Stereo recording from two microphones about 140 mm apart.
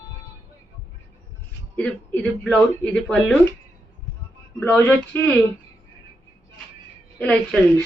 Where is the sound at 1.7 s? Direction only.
5° left (ahead or behind).